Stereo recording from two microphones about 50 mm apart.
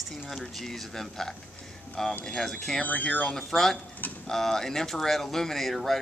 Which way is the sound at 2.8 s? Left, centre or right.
Left.